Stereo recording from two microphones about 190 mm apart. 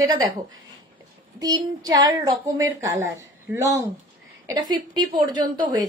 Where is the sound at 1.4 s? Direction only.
20° right (ahead or behind).